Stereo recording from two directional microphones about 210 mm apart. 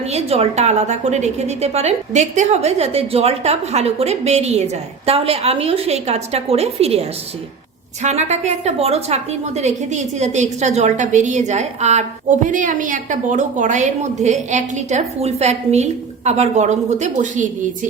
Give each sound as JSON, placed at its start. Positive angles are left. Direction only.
{"t": 0.1, "sound": "a woman's voice", "side_deg": -30}
{"t": 8.0, "sound": "a woman's voice", "side_deg": -35}